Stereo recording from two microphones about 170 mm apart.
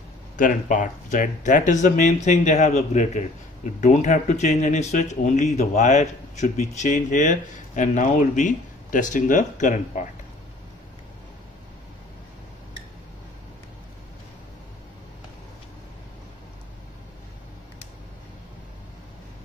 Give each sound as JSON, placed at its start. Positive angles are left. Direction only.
{"t": 0.4, "sound": "speech", "side_deg": 50}